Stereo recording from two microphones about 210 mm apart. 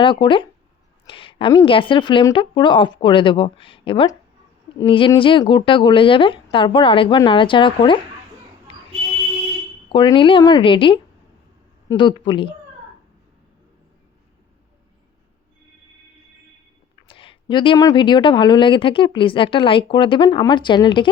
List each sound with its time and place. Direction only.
0.0 s speech: 25° left (ahead or behind)
9.9 s speech: 25° left (ahead or behind)
17.1 s speech: 25° left (ahead or behind)